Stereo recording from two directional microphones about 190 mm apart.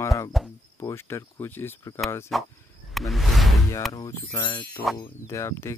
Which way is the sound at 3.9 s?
15° left (ahead or behind).